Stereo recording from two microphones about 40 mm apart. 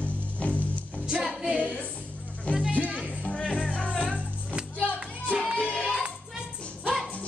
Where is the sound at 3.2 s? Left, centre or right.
Left.